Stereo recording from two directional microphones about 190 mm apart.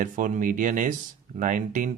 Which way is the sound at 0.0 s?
45° right (ahead or behind).